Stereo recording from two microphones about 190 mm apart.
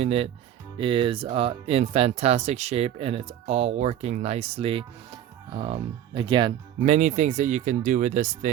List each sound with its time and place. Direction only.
0.0 s speech: 30° right (ahead or behind)
6.7 s speech: 35° right (ahead or behind)